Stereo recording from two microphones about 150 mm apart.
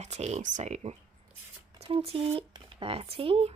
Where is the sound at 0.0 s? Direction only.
50° right (ahead or behind).